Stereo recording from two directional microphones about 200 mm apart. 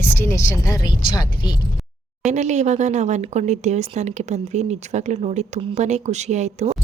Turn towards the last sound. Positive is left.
turn(degrees=-35)  # may be behind; listen again after turning